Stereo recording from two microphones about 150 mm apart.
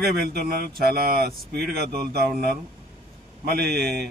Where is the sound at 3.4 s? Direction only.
90° right.